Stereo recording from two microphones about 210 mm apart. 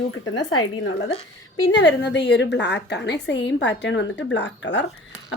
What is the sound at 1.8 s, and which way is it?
A woman's voice, 55° left (ahead or behind).